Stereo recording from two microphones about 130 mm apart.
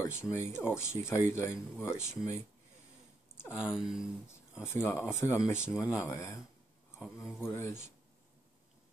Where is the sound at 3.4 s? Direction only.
5° right (ahead or behind).